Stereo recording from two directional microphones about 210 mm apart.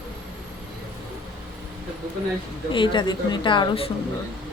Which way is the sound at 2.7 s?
20° left (ahead or behind).